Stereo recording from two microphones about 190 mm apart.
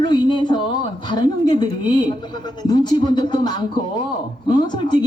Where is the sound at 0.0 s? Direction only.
25° left (ahead or behind).